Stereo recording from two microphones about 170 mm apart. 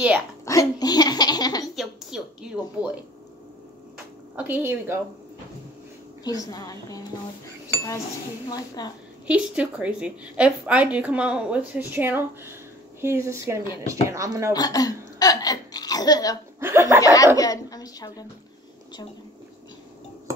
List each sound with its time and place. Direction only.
0.5 s hiccup: 20° left (ahead or behind)
1.8 s a sound: 5° right (ahead or behind)
4.4 s a woman's voice: 10° right (ahead or behind)
6.2 s speech: 20° left (ahead or behind)
8.5 s speech: 25° left (ahead or behind)
9.3 s a woman's voice: 5° right (ahead or behind)
14.5 s speech: 20° left (ahead or behind)
16.5 s a woman's voice: 15° right (ahead or behind)
17.0 s speech: 20° left (ahead or behind)